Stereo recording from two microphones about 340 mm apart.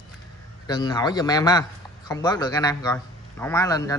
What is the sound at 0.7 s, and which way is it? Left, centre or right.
A man's voice, centre.